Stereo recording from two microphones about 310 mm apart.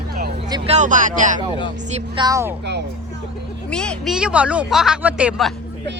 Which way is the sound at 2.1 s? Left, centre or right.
Centre.